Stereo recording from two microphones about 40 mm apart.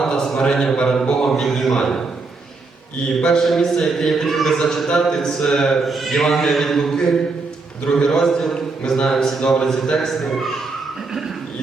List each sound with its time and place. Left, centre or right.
0.0 s a sound: centre
0.3 s a man's voice: centre
3.2 s a man's voice: centre
3.4 s a man's voice: centre
5.8 s a man's voice: centre